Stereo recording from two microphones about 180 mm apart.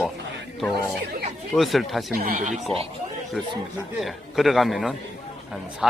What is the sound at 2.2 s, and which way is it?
Speech, 50° right (ahead or behind).